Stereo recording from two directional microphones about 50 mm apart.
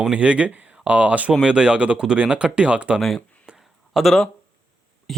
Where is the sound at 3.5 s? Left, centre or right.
Centre.